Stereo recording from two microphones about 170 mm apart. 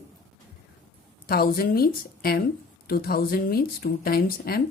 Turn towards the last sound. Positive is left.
turn(degrees=65)  # may be behind; listen again after turning